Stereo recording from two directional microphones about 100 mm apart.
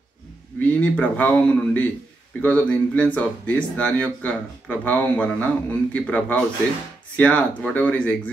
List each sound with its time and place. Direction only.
0.6 s speech: 15° left (ahead or behind)